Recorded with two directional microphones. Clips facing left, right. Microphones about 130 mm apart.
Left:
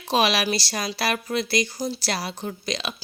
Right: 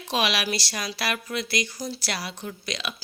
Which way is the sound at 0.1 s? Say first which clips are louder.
Left 4 dB; 35° left (ahead or behind).